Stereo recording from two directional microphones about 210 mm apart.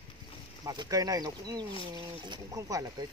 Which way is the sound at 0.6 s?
20° right (ahead or behind).